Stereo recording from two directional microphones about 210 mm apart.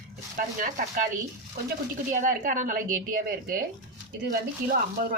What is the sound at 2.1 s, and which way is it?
Speech, 40° right (ahead or behind).